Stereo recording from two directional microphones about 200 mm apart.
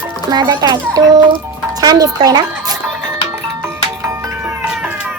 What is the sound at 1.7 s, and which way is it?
Music, 20° right (ahead or behind).